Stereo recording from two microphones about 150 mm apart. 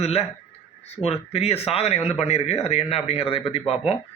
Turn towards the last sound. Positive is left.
turn(degrees=40)  # may be behind; listen again after turning